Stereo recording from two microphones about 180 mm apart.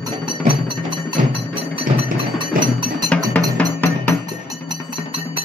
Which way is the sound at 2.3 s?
25° right (ahead or behind).